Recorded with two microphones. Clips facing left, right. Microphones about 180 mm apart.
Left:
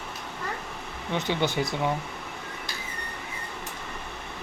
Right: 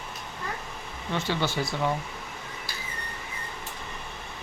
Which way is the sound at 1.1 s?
20° left (ahead or behind).